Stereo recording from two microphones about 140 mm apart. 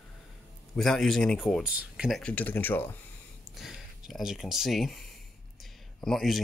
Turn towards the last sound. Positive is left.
turn(degrees=0)  # may be behind; listen again after turning